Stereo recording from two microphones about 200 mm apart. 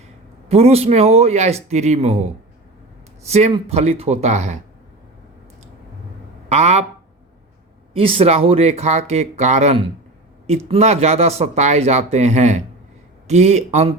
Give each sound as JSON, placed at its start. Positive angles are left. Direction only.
{"t": 0.4, "sound": "speech", "side_deg": -30}
{"t": 3.2, "sound": "speech", "side_deg": -30}
{"t": 6.5, "sound": "speech", "side_deg": -35}
{"t": 7.9, "sound": "speech", "side_deg": -30}